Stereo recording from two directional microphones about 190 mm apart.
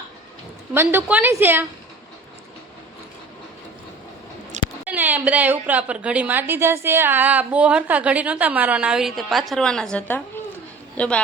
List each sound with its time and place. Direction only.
0.7 s a woman's voice: 10° right (ahead or behind)
4.6 s a sound: 40° right (ahead or behind)
4.9 s a woman's voice: 10° right (ahead or behind)